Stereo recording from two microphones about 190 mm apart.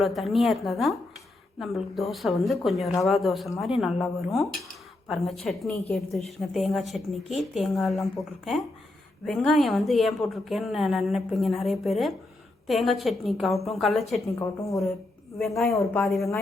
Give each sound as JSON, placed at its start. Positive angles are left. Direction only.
{"t": 0.0, "sound": "a woman's voice", "side_deg": 0}
{"t": 9.2, "sound": "a woman's voice", "side_deg": 0}
{"t": 14.3, "sound": "speech", "side_deg": 15}
{"t": 15.4, "sound": "a woman's voice", "side_deg": 0}